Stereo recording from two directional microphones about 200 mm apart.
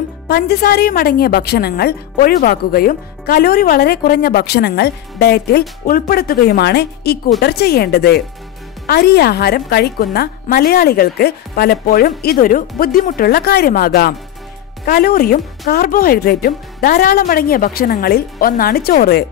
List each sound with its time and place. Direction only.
0.3 s a woman's voice: 50° left (ahead or behind)